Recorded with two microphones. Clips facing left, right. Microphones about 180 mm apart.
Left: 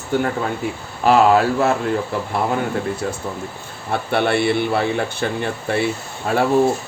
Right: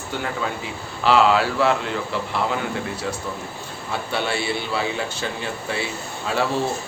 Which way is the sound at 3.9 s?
55° left (ahead or behind).